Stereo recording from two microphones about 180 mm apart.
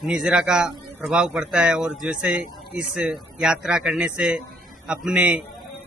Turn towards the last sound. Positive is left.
turn(degrees=-5)  # may be behind; listen again after turning